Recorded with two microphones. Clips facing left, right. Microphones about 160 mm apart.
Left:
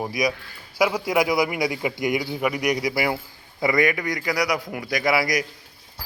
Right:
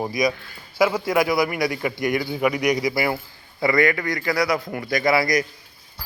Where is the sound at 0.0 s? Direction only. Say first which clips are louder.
Right 2 dB; 10° left (ahead or behind).